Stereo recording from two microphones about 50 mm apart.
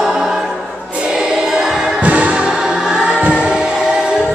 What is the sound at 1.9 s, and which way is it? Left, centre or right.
Music, right.